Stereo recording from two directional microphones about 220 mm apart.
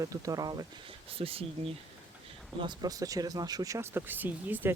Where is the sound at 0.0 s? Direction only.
15° right (ahead or behind).